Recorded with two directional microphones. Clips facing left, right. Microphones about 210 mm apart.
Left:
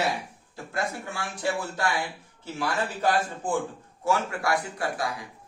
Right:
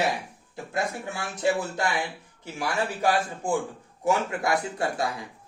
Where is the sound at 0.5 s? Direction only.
20° right (ahead or behind).